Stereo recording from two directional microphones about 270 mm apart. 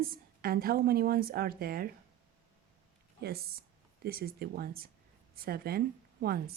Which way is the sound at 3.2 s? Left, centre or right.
Right.